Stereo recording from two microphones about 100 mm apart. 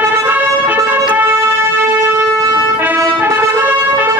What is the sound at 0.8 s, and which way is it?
Music, 15° right (ahead or behind).